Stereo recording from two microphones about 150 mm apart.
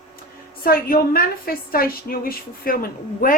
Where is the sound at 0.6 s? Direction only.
75° left (ahead or behind).